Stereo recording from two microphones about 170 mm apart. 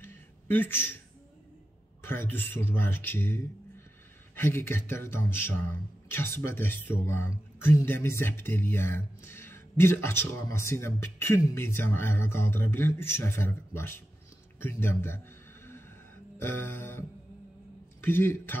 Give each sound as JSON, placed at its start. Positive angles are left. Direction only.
{"t": 0.0, "sound": "a sound", "side_deg": 10}
{"t": 2.0, "sound": "speech", "side_deg": 15}
{"t": 16.3, "sound": "speech", "side_deg": 15}
{"t": 18.0, "sound": "speech", "side_deg": 15}